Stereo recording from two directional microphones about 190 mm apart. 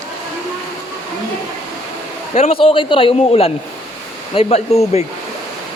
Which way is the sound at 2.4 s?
30° left (ahead or behind).